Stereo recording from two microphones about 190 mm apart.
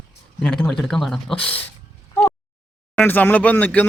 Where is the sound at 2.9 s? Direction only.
10° left (ahead or behind).